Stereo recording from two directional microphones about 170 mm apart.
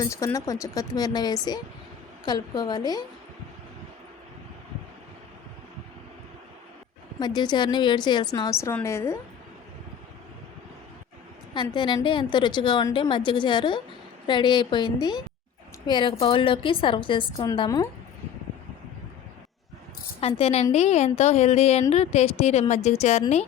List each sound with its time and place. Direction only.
0.0 s a woman's voice: 20° left (ahead or behind)
7.2 s a woman's voice: 25° left (ahead or behind)
11.5 s a woman's voice: 25° left (ahead or behind)
20.2 s a woman's voice: 35° left (ahead or behind)